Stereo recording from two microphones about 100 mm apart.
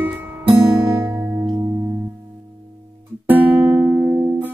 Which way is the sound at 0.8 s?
30° right (ahead or behind).